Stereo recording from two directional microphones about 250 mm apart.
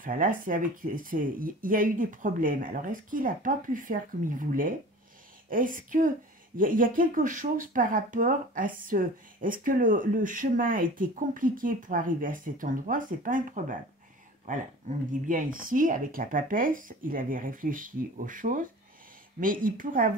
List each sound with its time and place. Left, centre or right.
0.0 s speech: right